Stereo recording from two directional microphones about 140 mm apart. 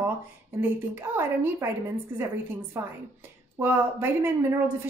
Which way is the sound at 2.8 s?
20° right (ahead or behind).